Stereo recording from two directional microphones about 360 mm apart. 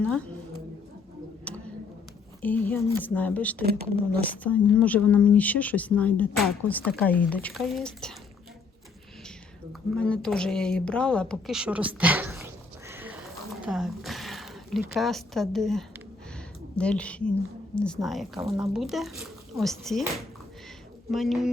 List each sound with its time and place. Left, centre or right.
1.5 s a sound: centre
2.4 s speech: centre
3.6 s speech: right
4.4 s speech: centre
9.9 s speech: centre
12.9 s a sound: centre
14.9 s speech: centre
21.1 s speech: centre